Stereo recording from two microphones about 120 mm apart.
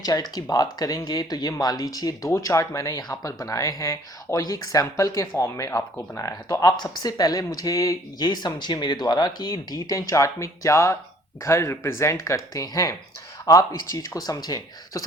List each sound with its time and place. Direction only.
0.0 s speech: 30° left (ahead or behind)